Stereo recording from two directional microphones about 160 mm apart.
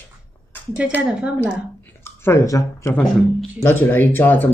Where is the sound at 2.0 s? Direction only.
15° left (ahead or behind).